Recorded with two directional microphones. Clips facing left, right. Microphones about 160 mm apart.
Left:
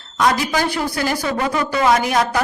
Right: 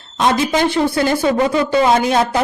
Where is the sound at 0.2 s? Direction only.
25° right (ahead or behind).